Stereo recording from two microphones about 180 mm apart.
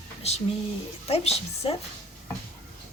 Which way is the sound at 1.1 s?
35° left (ahead or behind).